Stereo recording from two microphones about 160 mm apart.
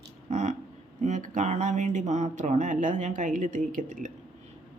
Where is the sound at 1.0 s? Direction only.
50° right (ahead or behind).